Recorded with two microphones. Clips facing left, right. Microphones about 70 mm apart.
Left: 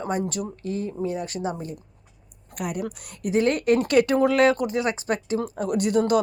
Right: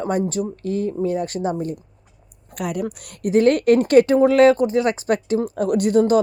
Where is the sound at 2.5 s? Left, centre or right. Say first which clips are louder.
Right 4 dB; right.